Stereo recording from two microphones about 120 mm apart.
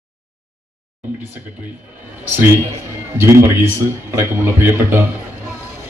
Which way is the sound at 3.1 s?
20° right (ahead or behind).